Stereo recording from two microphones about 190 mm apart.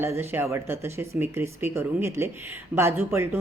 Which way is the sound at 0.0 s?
10° right (ahead or behind).